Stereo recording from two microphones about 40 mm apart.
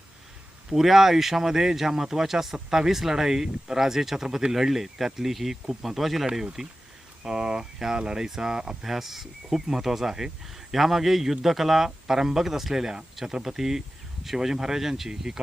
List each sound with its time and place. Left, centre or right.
0.7 s speech: centre
8.8 s speech: centre